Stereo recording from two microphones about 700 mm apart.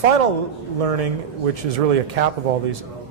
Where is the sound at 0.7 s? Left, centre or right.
Right.